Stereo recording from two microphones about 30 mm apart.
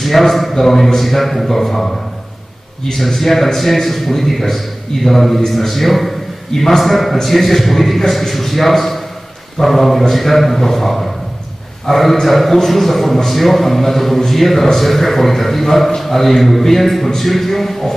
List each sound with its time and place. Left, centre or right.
0.0 s a man's voice: centre